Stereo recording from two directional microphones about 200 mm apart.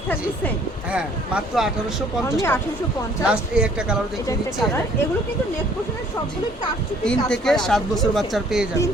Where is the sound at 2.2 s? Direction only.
15° left (ahead or behind).